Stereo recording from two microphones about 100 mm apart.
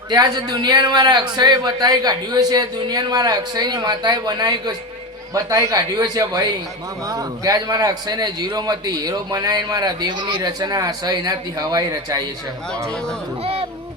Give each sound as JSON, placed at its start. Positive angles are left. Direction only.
{"t": 0.1, "sound": "a man's voice", "side_deg": -45}
{"t": 13.4, "sound": "speech", "side_deg": -85}